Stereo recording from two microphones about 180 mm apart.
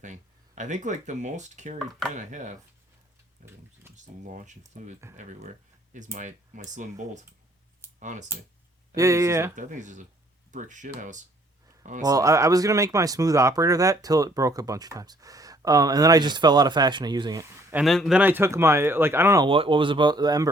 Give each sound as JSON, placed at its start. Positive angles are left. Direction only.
{"t": 0.0, "sound": "speech", "side_deg": -45}
{"t": 9.0, "sound": "speech", "side_deg": -15}
{"t": 9.6, "sound": "speech", "side_deg": -45}
{"t": 12.0, "sound": "speech", "side_deg": -20}
{"t": 17.8, "sound": "speech", "side_deg": 0}
{"t": 19.5, "sound": "speech", "side_deg": -30}